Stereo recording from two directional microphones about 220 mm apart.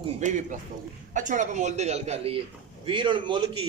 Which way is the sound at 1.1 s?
35° right (ahead or behind).